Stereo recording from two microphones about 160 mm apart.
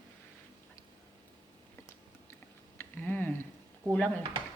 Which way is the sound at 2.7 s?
10° left (ahead or behind).